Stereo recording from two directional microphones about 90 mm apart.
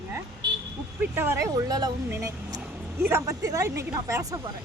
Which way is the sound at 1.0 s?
25° right (ahead or behind).